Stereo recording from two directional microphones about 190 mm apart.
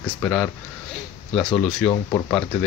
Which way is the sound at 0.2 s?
5° left (ahead or behind).